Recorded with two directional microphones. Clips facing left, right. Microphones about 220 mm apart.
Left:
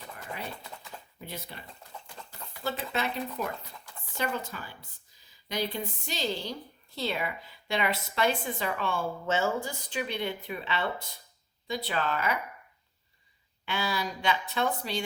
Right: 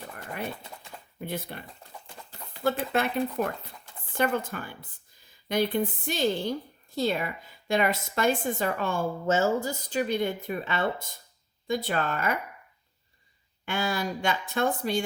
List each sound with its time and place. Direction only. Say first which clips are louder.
1.2 s speech: right 8 dB; 55° right (ahead or behind)
2.6 s a woman's voice: right 6 dB; 55° right (ahead or behind)
13.7 s a woman's voice: right 3 dB; 50° right (ahead or behind)